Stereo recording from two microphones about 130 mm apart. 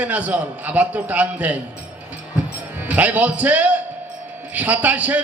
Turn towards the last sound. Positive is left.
turn(degrees=-10)  # may be behind; listen again after turning